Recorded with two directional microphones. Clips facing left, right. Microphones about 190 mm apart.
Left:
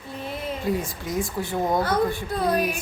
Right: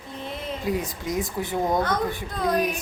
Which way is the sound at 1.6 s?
5° left (ahead or behind).